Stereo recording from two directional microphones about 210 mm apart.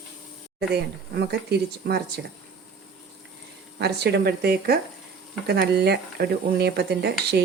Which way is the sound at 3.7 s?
50° right (ahead or behind).